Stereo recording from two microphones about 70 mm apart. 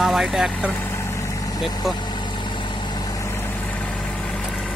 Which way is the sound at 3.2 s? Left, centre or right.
Left.